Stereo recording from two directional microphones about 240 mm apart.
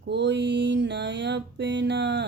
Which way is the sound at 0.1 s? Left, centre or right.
Right.